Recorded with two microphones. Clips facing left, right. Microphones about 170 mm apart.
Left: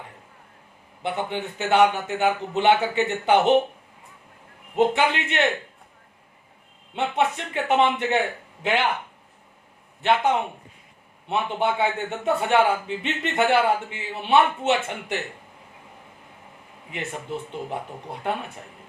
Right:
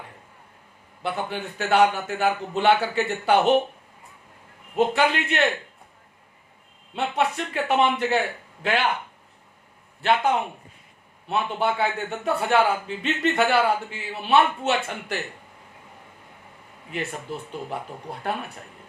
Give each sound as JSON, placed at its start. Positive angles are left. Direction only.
{"t": 1.0, "sound": "a man's voice", "side_deg": 20}
{"t": 4.8, "sound": "a man's voice", "side_deg": 20}
{"t": 6.9, "sound": "a man's voice", "side_deg": 20}
{"t": 10.0, "sound": "a man's voice", "side_deg": 20}
{"t": 16.9, "sound": "a man's voice", "side_deg": 20}